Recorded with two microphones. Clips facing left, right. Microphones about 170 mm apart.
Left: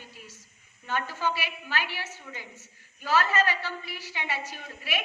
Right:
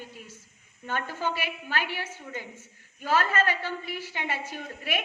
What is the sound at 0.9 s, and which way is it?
A woman's voice, 55° right (ahead or behind).